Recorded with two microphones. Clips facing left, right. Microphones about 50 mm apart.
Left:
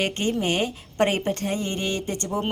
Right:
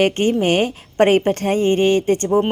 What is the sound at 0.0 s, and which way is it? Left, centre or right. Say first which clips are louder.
A woman's voice: right 8 dB; right.